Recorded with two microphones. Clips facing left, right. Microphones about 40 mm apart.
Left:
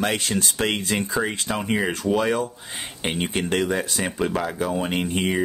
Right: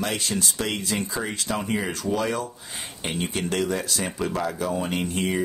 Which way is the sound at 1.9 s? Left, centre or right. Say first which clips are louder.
Left 4 dB; left.